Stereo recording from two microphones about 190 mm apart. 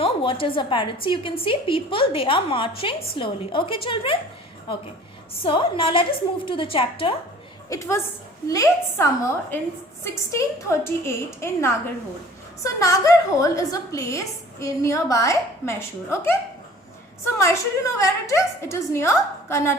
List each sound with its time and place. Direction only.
0.0 s a woman's voice: 25° left (ahead or behind)
5.4 s a woman's voice: 30° left (ahead or behind)
7.7 s a woman's voice: 15° left (ahead or behind)
17.3 s a woman's voice: 15° left (ahead or behind)